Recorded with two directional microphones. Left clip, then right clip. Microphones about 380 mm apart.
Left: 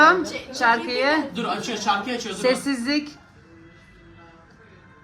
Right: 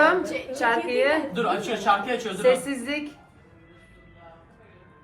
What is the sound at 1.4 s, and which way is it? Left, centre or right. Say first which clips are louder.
Speech: right 2 dB; centre.